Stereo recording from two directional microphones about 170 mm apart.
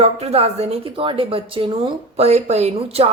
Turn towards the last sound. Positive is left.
turn(degrees=-35)  # may be behind; listen again after turning